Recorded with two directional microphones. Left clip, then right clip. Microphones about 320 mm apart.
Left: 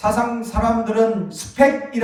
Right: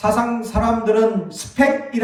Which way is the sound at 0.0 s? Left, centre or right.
Centre.